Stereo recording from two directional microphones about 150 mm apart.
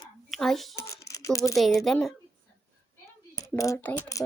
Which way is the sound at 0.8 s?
20° left (ahead or behind).